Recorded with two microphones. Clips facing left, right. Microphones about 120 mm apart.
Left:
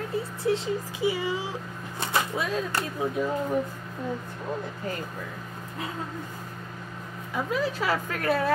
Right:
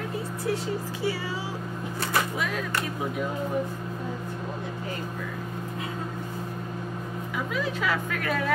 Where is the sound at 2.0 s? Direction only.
25° left (ahead or behind).